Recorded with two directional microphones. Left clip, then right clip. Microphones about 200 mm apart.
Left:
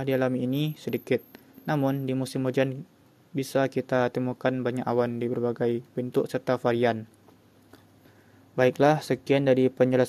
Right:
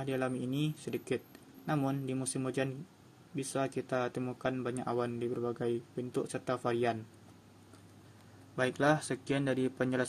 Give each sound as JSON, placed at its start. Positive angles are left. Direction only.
{"t": 0.0, "sound": "speech", "side_deg": 45}
{"t": 8.5, "sound": "speech", "side_deg": 35}